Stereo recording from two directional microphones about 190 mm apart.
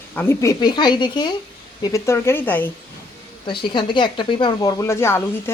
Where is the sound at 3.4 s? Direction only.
25° left (ahead or behind).